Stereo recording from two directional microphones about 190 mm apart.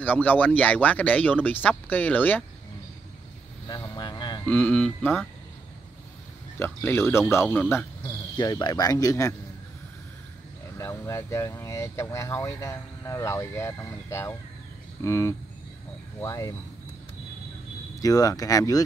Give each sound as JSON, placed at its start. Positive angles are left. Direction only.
{"t": 0.0, "sound": "speech", "side_deg": 10}
{"t": 3.6, "sound": "vehicle", "side_deg": 20}
{"t": 4.5, "sound": "speech", "side_deg": 10}
{"t": 6.6, "sound": "speech", "side_deg": 10}
{"t": 10.8, "sound": "speech", "side_deg": 15}
{"t": 17.9, "sound": "speech", "side_deg": 20}